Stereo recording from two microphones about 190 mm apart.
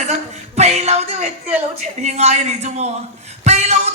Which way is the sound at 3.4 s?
35° right (ahead or behind).